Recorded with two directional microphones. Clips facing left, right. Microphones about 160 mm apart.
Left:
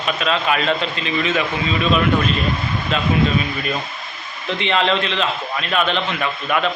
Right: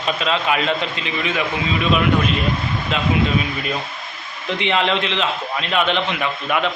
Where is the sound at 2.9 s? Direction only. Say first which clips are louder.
Left 1 dB; 15° right (ahead or behind).